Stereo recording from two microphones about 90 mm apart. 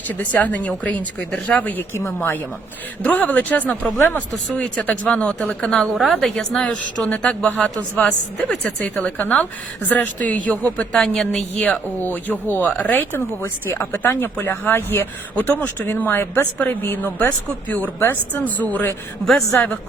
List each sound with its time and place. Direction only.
0.1 s a woman's voice: 20° left (ahead or behind)
3.0 s a woman's voice: 20° left (ahead or behind)
10.9 s speech: 5° left (ahead or behind); by 18.9 s 20° left (ahead or behind)
19.2 s a woman's voice: 5° left (ahead or behind)